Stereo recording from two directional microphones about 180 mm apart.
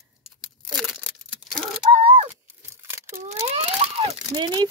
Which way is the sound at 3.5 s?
35° right (ahead or behind).